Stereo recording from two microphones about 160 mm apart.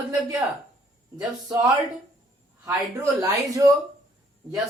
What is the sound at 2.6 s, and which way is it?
Speech, 20° right (ahead or behind).